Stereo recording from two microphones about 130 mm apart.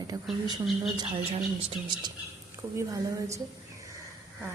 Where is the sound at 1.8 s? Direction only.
35° right (ahead or behind).